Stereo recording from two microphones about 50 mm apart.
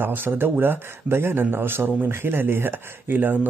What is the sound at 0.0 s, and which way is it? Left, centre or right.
A man's voice, right.